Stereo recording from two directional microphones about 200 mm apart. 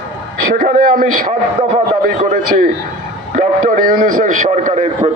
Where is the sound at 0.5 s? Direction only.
45° right (ahead or behind).